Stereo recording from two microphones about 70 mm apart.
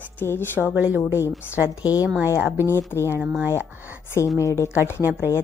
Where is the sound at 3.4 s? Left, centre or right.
Right.